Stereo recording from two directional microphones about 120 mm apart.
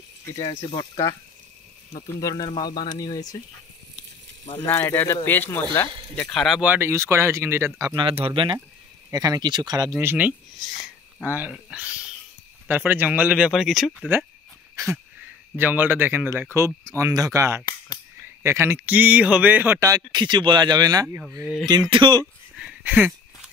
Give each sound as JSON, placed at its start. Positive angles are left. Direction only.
{"t": 0.5, "sound": "speech", "side_deg": 40}
{"t": 2.1, "sound": "speech", "side_deg": 30}
{"t": 4.6, "sound": "speech", "side_deg": 20}
{"t": 6.3, "sound": "speech", "side_deg": 0}
{"t": 6.6, "sound": "speech", "side_deg": -20}
{"t": 7.9, "sound": "speech", "side_deg": -50}
{"t": 9.1, "sound": "a man's voice", "side_deg": -30}
{"t": 9.9, "sound": "speech", "side_deg": -15}
{"t": 10.6, "sound": "wheeze", "side_deg": 0}
{"t": 11.2, "sound": "speech", "side_deg": -15}
{"t": 15.5, "sound": "speech", "side_deg": -15}
{"t": 19.8, "sound": "a man's voice", "side_deg": -30}
{"t": 22.6, "sound": "a sound", "side_deg": -5}
{"t": 22.9, "sound": "a sound", "side_deg": -15}